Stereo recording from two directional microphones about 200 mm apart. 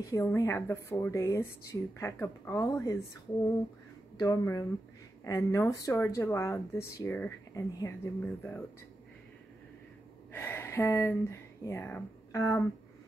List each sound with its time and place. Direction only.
0.0 s speech: 15° left (ahead or behind)
4.2 s speech: 20° left (ahead or behind)
10.3 s speech: 10° left (ahead or behind)